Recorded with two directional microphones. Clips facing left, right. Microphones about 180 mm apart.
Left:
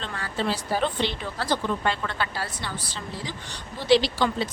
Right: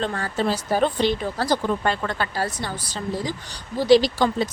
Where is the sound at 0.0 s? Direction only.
45° right (ahead or behind).